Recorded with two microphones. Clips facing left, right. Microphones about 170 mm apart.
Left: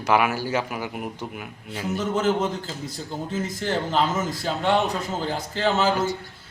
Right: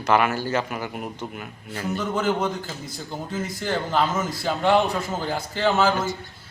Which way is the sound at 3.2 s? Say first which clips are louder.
Even; 20° left (ahead or behind).